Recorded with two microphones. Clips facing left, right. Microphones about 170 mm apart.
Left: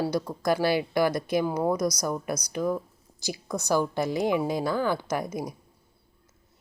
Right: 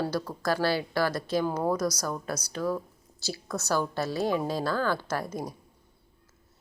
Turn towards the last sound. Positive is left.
turn(degrees=15)  # may be behind; listen again after turning